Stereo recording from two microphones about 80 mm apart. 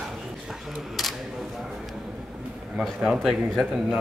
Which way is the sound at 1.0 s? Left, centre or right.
Centre.